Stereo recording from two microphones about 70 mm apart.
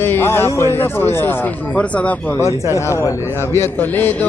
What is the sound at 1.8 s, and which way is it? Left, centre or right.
Speech, centre.